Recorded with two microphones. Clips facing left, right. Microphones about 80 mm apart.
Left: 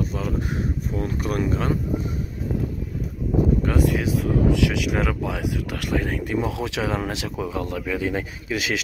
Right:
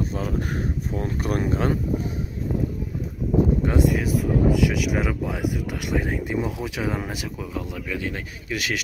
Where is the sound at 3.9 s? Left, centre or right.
Centre.